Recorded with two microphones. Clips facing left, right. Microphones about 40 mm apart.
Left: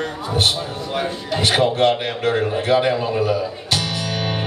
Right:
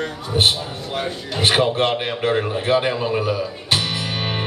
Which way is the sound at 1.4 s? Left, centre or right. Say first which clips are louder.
Left 1 dB; centre.